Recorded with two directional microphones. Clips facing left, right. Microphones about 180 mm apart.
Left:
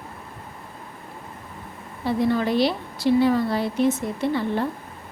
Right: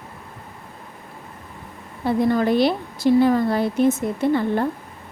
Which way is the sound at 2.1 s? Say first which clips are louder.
Right 3 dB; 45° right (ahead or behind).